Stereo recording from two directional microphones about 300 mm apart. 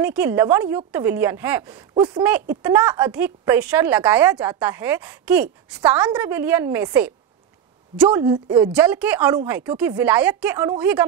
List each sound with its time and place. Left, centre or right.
0.0 s a woman's voice: centre